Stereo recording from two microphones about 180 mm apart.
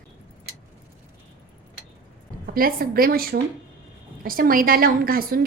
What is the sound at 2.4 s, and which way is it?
A woman's voice, 55° right (ahead or behind).